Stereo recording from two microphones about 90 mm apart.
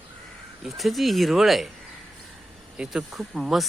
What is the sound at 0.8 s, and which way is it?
Speech, centre (ahead or behind).